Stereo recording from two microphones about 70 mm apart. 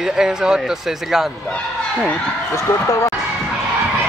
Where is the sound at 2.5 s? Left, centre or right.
Left.